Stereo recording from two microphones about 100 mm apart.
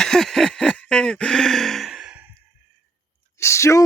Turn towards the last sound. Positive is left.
turn(degrees=30)  # may be behind; listen again after turning